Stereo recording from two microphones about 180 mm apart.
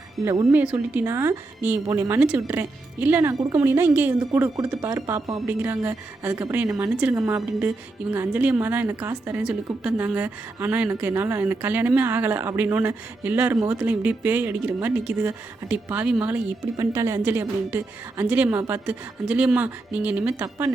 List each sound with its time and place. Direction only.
0.2 s a woman's voice: 15° right (ahead or behind)
7.2 s a woman's voice: 15° right (ahead or behind)
16.7 s a woman's voice: 15° right (ahead or behind)